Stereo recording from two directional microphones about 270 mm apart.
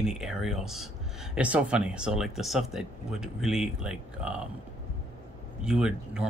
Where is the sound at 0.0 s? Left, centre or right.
Centre.